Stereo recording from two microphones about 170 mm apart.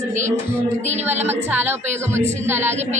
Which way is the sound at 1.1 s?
40° right (ahead or behind).